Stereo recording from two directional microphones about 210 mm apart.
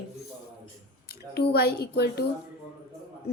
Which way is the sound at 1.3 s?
50° left (ahead or behind).